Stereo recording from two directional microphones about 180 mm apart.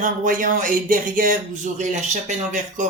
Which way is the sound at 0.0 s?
45° right (ahead or behind).